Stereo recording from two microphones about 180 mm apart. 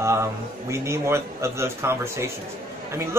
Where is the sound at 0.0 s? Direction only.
15° right (ahead or behind).